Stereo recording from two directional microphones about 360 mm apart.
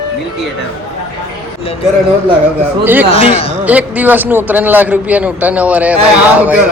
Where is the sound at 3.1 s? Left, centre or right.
Centre.